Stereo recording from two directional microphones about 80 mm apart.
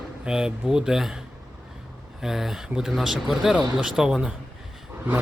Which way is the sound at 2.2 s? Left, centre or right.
Centre.